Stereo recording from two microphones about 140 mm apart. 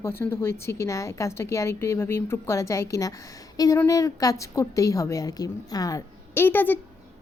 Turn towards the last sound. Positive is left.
turn(degrees=15)  # may be behind; listen again after turning